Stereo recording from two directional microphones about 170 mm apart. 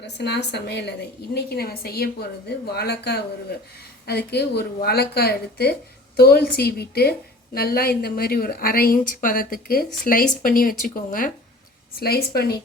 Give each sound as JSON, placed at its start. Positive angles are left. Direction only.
{"t": 0.0, "sound": "a woman's voice", "side_deg": 80}